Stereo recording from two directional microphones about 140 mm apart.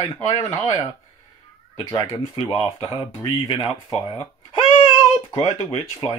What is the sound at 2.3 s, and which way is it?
Speech, 40° left (ahead or behind).